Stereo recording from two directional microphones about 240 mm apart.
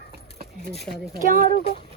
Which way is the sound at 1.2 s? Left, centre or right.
Right.